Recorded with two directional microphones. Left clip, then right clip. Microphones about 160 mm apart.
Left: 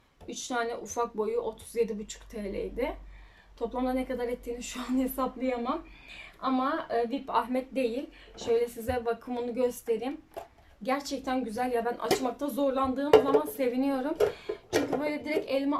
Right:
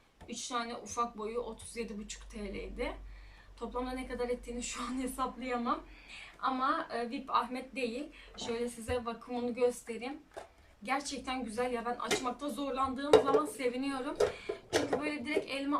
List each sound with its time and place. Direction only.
0.3 s speech: 40° left (ahead or behind)
8.9 s a woman's voice: 45° left (ahead or behind)
14.2 s speech: 5° left (ahead or behind)
15.0 s speech: 35° left (ahead or behind)